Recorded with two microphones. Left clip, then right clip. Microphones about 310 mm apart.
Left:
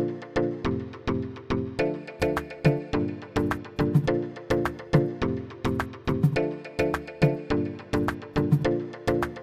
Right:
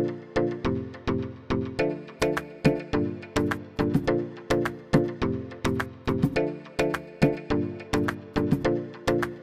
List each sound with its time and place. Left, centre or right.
0.3 s music: centre